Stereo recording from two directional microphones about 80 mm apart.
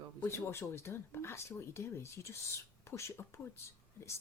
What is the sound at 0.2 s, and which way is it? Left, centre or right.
Speech, left.